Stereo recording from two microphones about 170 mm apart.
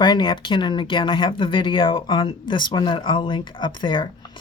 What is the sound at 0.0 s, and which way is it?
Speech, 25° left (ahead or behind).